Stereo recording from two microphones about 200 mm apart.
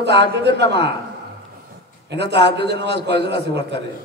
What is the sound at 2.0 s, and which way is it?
A man's voice, 60° right (ahead or behind).